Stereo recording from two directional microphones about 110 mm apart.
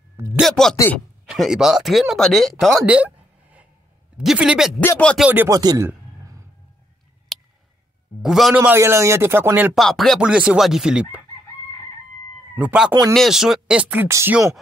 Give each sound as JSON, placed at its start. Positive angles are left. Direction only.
{"t": 0.4, "sound": "speech", "side_deg": 5}
{"t": 2.9, "sound": "a sound", "side_deg": -10}
{"t": 4.2, "sound": "speech", "side_deg": -5}
{"t": 4.8, "sound": "speech", "side_deg": 15}
{"t": 5.5, "sound": "speech", "side_deg": -35}
{"t": 7.3, "sound": "a sound", "side_deg": 0}
{"t": 8.2, "sound": "speech", "side_deg": 0}
{"t": 8.5, "sound": "speech", "side_deg": -15}
{"t": 8.8, "sound": "speech", "side_deg": -25}
{"t": 9.8, "sound": "speech", "side_deg": 5}
{"t": 10.2, "sound": "speech", "side_deg": -10}
{"t": 12.5, "sound": "speech", "side_deg": -10}
{"t": 14.0, "sound": "speech", "side_deg": -25}